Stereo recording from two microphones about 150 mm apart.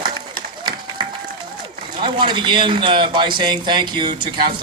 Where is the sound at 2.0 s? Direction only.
35° right (ahead or behind).